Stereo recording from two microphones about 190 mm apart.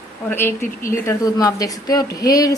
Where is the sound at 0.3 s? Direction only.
10° left (ahead or behind).